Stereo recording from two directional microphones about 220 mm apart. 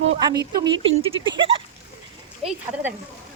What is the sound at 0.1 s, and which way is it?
Speech, 20° right (ahead or behind).